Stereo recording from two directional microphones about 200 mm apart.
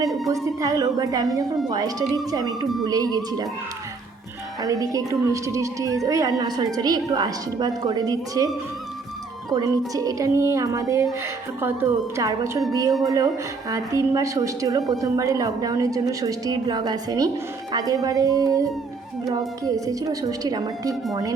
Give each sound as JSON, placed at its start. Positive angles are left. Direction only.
{"t": 0.4, "sound": "a woman's voice", "side_deg": -15}
{"t": 4.6, "sound": "a woman's voice", "side_deg": -15}
{"t": 9.5, "sound": "a woman's voice", "side_deg": -20}